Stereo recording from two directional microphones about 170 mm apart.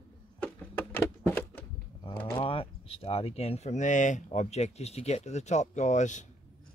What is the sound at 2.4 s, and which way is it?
Speech, 30° left (ahead or behind).